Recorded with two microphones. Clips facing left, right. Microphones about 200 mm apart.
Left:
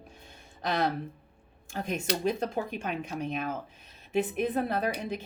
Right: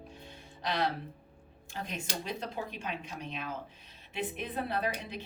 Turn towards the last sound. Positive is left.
turn(degrees=45)  # may be behind; listen again after turning